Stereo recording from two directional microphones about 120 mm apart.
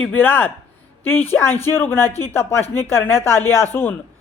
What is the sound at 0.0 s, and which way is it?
Speech, 15° left (ahead or behind).